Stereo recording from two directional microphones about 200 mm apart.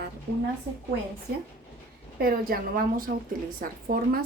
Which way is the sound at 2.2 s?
45° right (ahead or behind).